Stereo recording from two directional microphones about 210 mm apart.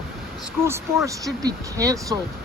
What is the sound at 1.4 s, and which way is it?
Speech, 15° right (ahead or behind).